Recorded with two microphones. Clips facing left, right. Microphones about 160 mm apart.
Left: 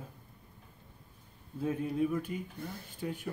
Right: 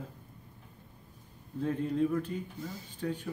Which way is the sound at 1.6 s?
10° left (ahead or behind).